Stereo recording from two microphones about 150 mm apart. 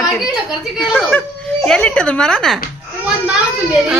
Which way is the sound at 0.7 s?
Centre (ahead or behind).